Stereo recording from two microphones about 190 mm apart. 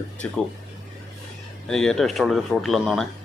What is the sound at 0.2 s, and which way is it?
Speech, 5° left (ahead or behind).